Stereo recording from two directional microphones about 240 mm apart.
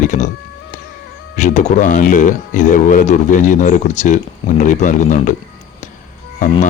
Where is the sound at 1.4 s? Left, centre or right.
Left.